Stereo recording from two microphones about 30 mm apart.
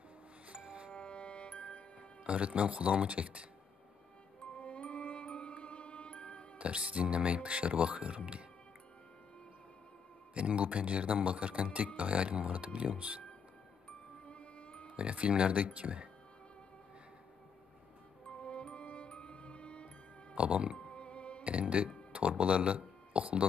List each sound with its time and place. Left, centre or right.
0.5 s music: right
0.9 s music: left
2.2 s speech: right
4.6 s music: left
6.6 s speech: right
10.3 s speech: right
14.2 s music: left
15.0 s speech: right
18.4 s music: left
20.3 s speech: right
20.9 s music: left
21.5 s speech: right